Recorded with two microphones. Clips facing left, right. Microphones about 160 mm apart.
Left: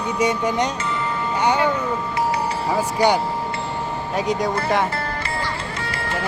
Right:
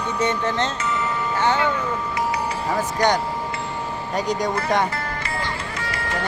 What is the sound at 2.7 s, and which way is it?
Speech, 10° left (ahead or behind).